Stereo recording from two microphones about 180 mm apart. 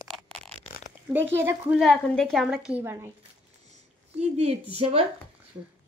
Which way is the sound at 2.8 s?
15° right (ahead or behind).